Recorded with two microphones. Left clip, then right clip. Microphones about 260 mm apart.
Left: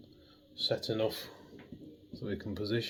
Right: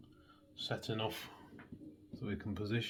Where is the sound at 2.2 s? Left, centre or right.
Right.